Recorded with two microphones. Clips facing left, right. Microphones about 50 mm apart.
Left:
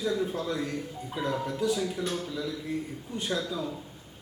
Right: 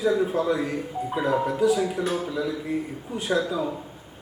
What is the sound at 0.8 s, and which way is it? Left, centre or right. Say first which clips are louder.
A man's voice: right 7 dB; centre.